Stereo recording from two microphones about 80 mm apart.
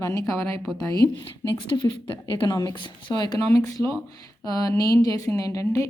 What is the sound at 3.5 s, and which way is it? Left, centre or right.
A woman's voice, left.